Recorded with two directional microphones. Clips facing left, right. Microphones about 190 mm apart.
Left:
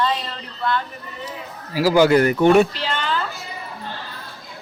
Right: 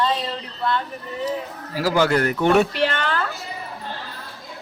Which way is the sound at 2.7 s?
65° right (ahead or behind).